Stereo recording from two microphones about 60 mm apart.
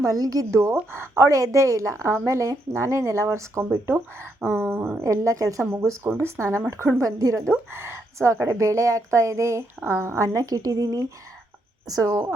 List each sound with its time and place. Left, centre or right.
0.0 s speech: right
0.9 s speech: right
1.4 s speech: right
4.4 s speech: right
5.0 s speech: right
7.0 s a woman's voice: right
7.7 s speech: right
8.4 s speech: right
10.2 s a woman's voice: right